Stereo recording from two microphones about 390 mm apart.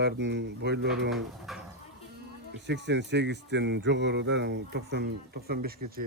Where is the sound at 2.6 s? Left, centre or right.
Right.